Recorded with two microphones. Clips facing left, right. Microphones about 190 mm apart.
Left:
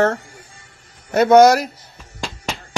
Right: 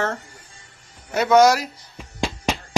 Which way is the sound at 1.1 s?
55° left (ahead or behind).